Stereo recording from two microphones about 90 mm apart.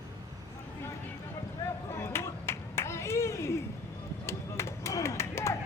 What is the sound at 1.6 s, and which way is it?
Clapping, 30° left (ahead or behind).